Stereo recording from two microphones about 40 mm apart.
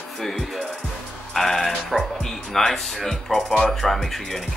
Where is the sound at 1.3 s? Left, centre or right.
Centre.